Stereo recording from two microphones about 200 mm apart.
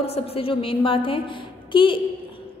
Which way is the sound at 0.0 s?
30° left (ahead or behind).